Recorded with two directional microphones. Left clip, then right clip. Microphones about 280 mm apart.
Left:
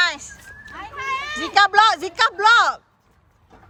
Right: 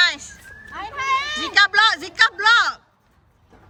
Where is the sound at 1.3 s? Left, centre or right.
Centre.